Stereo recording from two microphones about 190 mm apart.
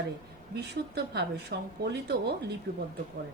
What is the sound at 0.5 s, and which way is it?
Speech, 60° right (ahead or behind).